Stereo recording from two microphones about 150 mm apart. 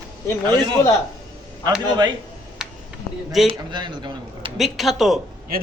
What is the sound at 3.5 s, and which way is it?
Speech, 30° right (ahead or behind).